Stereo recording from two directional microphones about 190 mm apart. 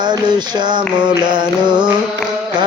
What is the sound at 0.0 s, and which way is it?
Music, 20° right (ahead or behind).